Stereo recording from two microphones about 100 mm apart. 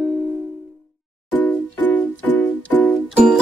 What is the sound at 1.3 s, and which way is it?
Music, 15° left (ahead or behind).